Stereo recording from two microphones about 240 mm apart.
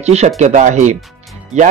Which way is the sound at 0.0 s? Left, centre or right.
Right.